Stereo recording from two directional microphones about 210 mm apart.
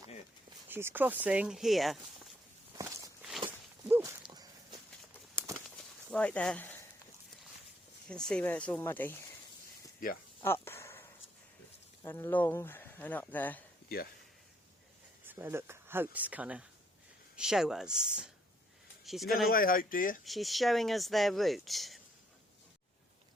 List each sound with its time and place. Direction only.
0.7 s speech: 10° right (ahead or behind)
3.2 s walk: centre (ahead or behind); by 4.8 s 20° right (ahead or behind)
5.7 s a sound: 5° left (ahead or behind)
8.0 s speech: 5° left (ahead or behind)
10.4 s a sound: 10° left (ahead or behind)
12.0 s speech: 10° left (ahead or behind)
15.3 s speech: 10° right (ahead or behind)
19.5 s speech: 40° left (ahead or behind)
20.2 s speech: centre (ahead or behind)